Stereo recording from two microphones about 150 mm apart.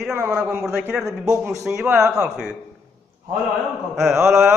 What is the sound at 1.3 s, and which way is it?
Speech, 15° right (ahead or behind).